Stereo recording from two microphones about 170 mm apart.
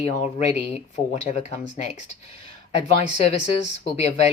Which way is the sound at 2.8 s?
35° left (ahead or behind).